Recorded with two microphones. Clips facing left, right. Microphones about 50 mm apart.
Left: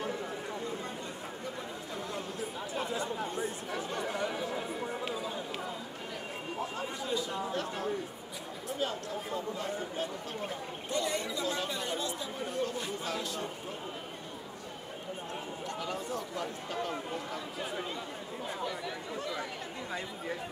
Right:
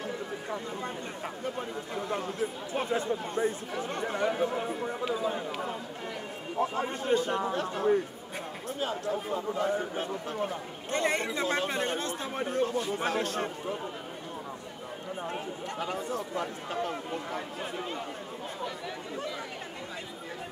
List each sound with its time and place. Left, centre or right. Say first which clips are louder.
2.0 s speech: right 8 dB; right
4.0 s chatter: right 8 dB; right
5.2 s a sound: right 6 dB; right
6.6 s speech: right 9 dB; right
10.5 s speech: right 2 dB; right
15.2 s speech: right 4 dB; right